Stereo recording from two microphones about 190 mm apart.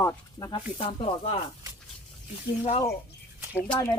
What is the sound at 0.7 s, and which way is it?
Speech, 30° left (ahead or behind).